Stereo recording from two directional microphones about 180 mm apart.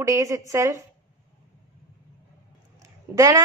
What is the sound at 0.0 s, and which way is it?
Speech, 15° right (ahead or behind).